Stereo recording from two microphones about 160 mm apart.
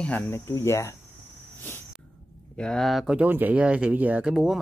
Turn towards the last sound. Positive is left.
turn(degrees=-5)  # may be behind; listen again after turning